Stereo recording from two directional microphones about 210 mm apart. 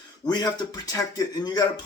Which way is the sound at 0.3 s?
20° left (ahead or behind).